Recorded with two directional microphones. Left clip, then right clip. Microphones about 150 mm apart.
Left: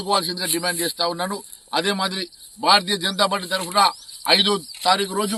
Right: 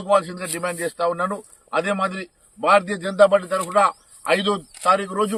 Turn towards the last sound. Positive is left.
turn(degrees=-5)  # may be behind; listen again after turning